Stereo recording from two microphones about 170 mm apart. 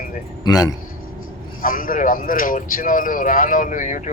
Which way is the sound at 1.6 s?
55° left (ahead or behind).